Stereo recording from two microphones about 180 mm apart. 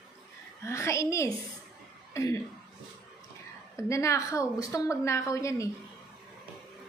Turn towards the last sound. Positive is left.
turn(degrees=15)  # may be behind; listen again after turning